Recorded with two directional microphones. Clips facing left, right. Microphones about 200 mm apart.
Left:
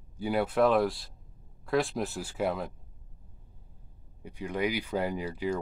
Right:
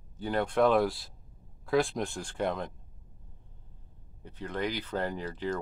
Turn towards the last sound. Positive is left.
turn(degrees=10)  # may be behind; listen again after turning